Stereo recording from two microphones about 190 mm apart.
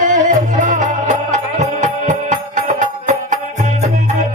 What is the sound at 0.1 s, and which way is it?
Music, 40° right (ahead or behind).